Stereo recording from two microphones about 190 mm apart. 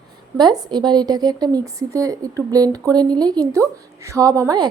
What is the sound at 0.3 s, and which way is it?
A woman's voice, 20° right (ahead or behind).